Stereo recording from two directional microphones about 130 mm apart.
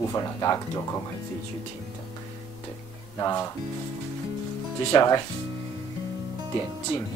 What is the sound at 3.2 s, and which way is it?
Speech, 25° left (ahead or behind).